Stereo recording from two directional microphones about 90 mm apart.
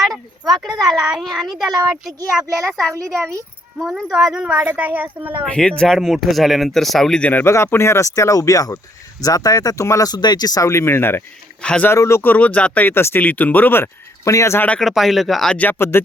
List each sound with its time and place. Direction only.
0.4 s a woman's voice: centre (ahead or behind)
2.9 s speech: 35° right (ahead or behind)
3.8 s a woman's voice: centre (ahead or behind); by 5.5 s 15° right (ahead or behind)
5.5 s speech: 10° left (ahead or behind)
7.4 s speech: 30° left (ahead or behind); by 10.7 s 45° left (ahead or behind)
10.7 s speech: 30° left (ahead or behind)
11.6 s speech: 10° left (ahead or behind)
11.9 s speech: 30° left (ahead or behind)
14.8 s speech: centre (ahead or behind)
15.5 s speech: 20° left (ahead or behind)